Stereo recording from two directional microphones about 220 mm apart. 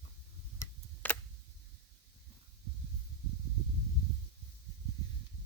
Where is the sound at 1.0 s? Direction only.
10° left (ahead or behind).